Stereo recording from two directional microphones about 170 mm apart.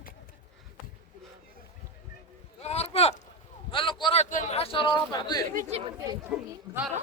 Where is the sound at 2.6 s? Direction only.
40° left (ahead or behind).